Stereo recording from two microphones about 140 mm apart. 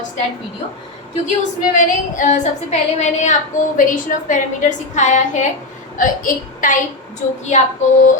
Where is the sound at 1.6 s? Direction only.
65° left (ahead or behind).